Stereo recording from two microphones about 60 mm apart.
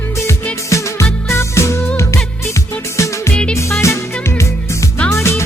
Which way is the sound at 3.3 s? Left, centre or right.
Centre.